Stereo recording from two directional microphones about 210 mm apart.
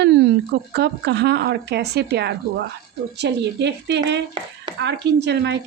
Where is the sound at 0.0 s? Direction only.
55° right (ahead or behind).